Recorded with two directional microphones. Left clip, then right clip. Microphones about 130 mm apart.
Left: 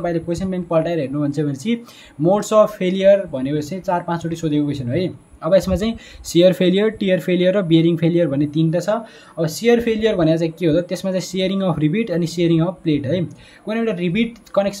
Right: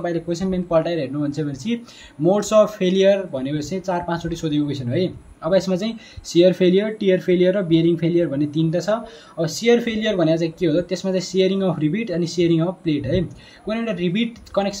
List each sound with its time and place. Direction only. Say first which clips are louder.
0.0 s speech: left 2 dB; 30° left (ahead or behind)